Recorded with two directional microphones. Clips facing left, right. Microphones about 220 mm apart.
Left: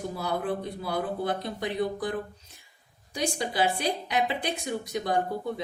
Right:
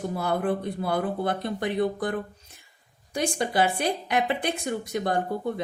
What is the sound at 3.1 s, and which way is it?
A woman's voice, 55° right (ahead or behind).